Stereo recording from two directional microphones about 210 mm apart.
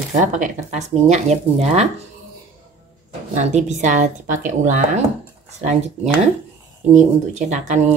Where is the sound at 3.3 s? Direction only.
35° right (ahead or behind).